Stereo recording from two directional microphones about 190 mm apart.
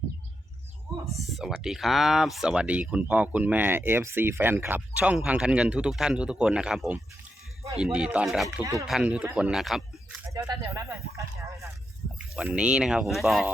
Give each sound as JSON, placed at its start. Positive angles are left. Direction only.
{"t": 1.1, "sound": "speech", "side_deg": 0}
{"t": 8.4, "sound": "speech", "side_deg": -15}
{"t": 8.9, "sound": "speech", "side_deg": -5}
{"t": 10.5, "sound": "speech", "side_deg": -15}
{"t": 12.4, "sound": "speech", "side_deg": -5}